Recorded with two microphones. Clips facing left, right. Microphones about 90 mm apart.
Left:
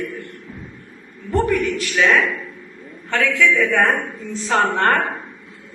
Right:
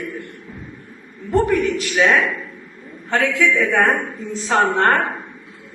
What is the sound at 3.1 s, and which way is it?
Speech, 25° right (ahead or behind).